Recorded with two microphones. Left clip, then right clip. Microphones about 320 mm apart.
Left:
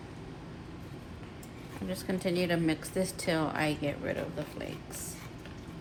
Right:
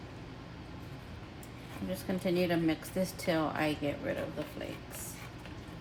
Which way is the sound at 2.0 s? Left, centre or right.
Left.